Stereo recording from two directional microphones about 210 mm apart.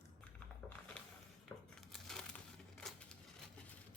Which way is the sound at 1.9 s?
5° left (ahead or behind).